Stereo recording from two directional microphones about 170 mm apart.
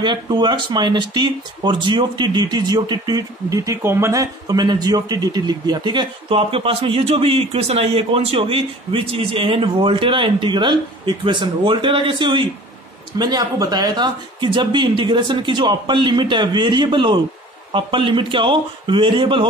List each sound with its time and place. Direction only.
0.0 s speech: 25° right (ahead or behind)